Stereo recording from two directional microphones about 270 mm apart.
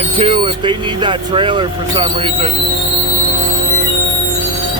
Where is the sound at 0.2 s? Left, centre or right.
Centre.